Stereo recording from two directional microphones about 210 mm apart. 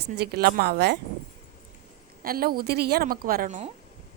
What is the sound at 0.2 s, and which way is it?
Speech, 50° right (ahead or behind).